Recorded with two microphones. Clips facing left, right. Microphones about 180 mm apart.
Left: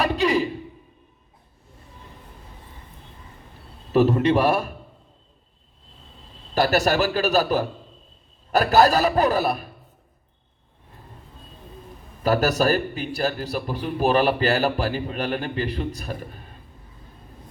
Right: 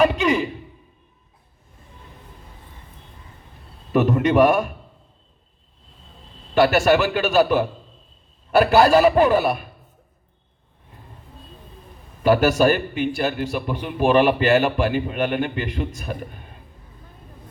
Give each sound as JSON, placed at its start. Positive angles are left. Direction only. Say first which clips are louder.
{"t": 0.0, "sound": "a sound", "louder": "right 3 dB", "side_deg": 35}
{"t": 3.9, "sound": "a man's voice", "louder": "right 1 dB", "side_deg": 30}
{"t": 6.5, "sound": "a man's voice", "louder": "right 4 dB", "side_deg": 40}
{"t": 12.2, "sound": "a man's voice", "louder": "right 4 dB", "side_deg": 40}